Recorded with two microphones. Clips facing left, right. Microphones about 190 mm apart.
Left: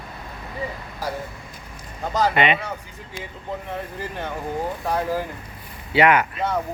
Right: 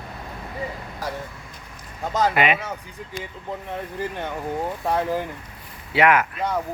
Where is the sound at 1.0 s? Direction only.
Centre (ahead or behind).